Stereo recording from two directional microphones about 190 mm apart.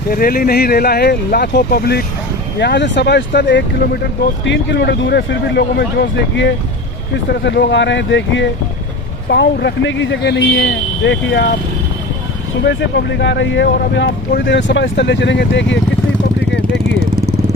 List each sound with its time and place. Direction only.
0.1 s speech: 50° left (ahead or behind)
2.6 s speech: 65° left (ahead or behind)
9.3 s speech: 65° left (ahead or behind)
12.6 s speech: 65° left (ahead or behind)